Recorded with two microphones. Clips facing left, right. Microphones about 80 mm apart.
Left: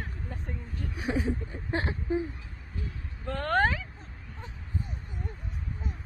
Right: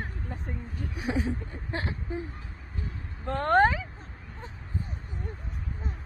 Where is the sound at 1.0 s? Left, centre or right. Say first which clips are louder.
Even; centre.